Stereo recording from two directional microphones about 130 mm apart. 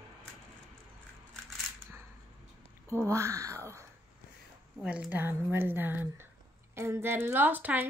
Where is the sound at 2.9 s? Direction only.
20° right (ahead or behind).